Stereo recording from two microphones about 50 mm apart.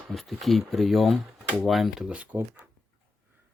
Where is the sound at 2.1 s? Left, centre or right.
Right.